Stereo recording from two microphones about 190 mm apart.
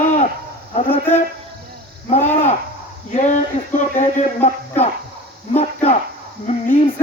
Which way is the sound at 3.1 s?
40° left (ahead or behind).